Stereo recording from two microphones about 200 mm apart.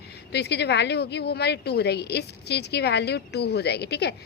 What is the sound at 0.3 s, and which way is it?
A woman's voice, 55° left (ahead or behind).